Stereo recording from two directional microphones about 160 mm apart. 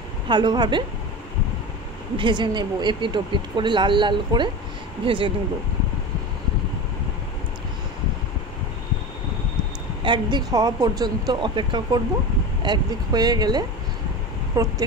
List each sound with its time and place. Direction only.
0.3 s speech: 30° right (ahead or behind)
2.1 s speech: 30° right (ahead or behind)
10.0 s speech: 30° right (ahead or behind)